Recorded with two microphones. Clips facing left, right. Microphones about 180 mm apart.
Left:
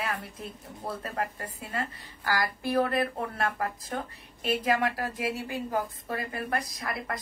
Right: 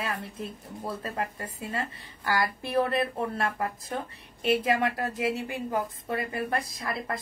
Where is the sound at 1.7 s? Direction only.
25° right (ahead or behind).